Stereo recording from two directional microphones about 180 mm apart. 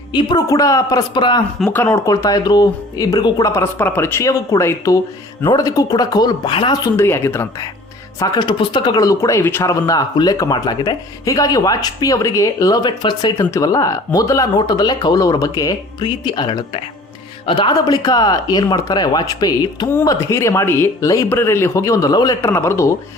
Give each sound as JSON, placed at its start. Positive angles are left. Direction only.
{"t": 0.1, "sound": "speech", "side_deg": 25}
{"t": 6.9, "sound": "speech", "side_deg": 15}
{"t": 8.2, "sound": "speech", "side_deg": 25}